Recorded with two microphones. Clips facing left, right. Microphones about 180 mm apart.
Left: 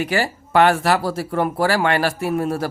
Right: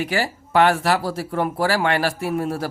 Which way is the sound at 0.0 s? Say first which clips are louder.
Left 2 dB; 55° left (ahead or behind).